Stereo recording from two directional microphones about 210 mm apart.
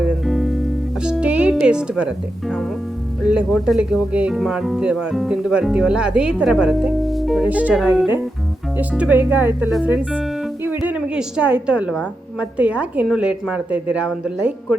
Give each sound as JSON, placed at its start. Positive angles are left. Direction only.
{"t": 0.0, "sound": "music", "side_deg": 0}
{"t": 1.0, "sound": "speech", "side_deg": -5}